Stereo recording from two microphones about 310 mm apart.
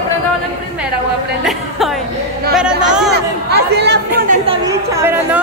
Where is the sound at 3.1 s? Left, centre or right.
Right.